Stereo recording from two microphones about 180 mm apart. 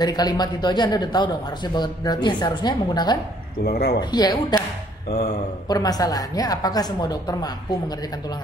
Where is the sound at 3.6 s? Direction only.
60° left (ahead or behind).